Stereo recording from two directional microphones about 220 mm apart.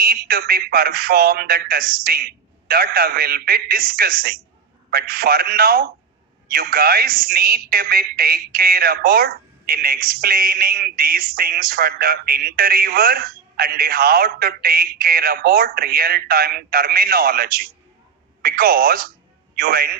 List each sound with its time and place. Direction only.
0.0 s a woman's voice: 40° right (ahead or behind)